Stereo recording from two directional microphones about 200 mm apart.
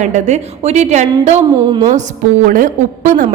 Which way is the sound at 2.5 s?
40° right (ahead or behind).